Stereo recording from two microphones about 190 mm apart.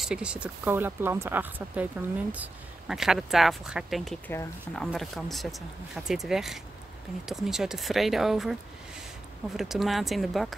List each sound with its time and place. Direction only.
0.0 s speech: 5° right (ahead or behind)
9.6 s speech: centre (ahead or behind)